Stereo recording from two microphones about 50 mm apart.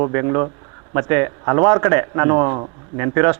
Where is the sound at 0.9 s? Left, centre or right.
Centre.